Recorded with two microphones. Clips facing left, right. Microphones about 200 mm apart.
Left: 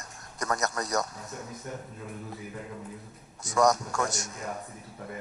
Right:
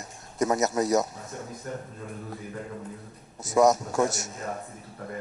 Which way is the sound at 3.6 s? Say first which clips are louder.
Right 4 dB; 5° right (ahead or behind).